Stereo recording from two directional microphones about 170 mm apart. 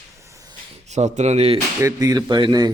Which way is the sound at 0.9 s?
40° right (ahead or behind).